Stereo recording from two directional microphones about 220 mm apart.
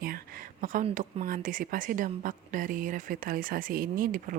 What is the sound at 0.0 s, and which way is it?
Speech, 40° right (ahead or behind).